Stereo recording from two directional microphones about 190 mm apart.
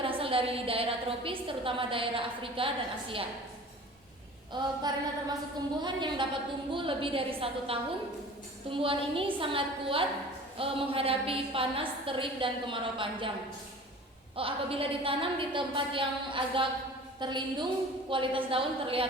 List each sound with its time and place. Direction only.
0.0 s a woman's voice: 30° right (ahead or behind)
4.5 s a woman's voice: 20° right (ahead or behind)
14.3 s a woman's voice: 30° right (ahead or behind)